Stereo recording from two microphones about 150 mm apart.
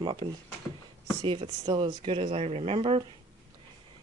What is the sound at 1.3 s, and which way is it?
Speech, 30° right (ahead or behind).